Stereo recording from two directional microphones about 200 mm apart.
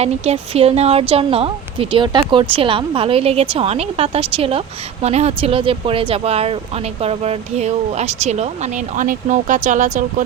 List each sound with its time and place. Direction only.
0.0 s a woman's voice: 30° right (ahead or behind)